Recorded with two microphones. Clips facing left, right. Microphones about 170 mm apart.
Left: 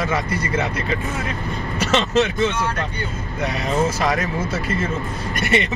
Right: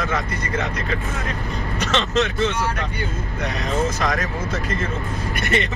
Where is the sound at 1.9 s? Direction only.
5° left (ahead or behind).